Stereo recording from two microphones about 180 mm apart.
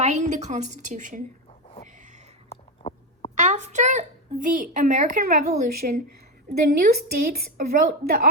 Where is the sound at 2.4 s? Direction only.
35° left (ahead or behind).